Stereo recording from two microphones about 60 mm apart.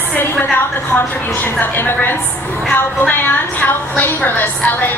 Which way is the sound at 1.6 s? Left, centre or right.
Left.